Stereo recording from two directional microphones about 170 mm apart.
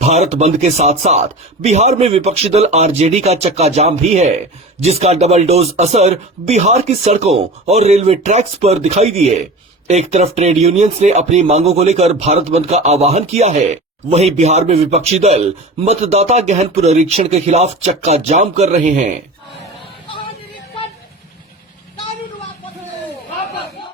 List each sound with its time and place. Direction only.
0.0 s speech: 40° right (ahead or behind)